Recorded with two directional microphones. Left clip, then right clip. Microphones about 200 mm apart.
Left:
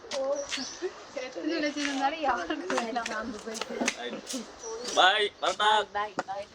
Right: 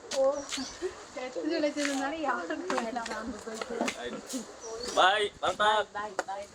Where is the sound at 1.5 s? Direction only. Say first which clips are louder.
Right 1 dB; 30° left (ahead or behind).